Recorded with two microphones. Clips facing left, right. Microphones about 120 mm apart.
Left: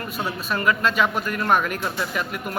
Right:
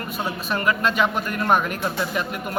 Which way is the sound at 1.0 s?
25° right (ahead or behind).